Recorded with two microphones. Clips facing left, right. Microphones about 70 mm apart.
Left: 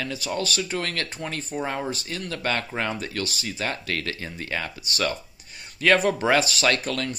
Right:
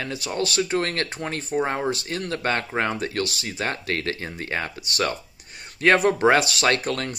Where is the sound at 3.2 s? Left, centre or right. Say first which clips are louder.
Right 2 dB; right.